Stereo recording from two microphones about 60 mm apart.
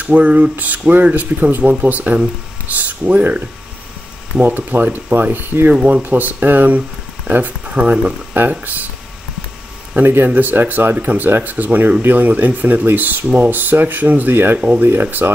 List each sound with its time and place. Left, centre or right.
0.0 s speech: right
5.8 s speech: centre
6.0 s speech: right
8.4 s speech: right
10.0 s speech: right